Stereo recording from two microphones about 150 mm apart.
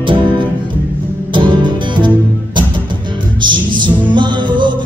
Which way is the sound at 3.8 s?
30° right (ahead or behind).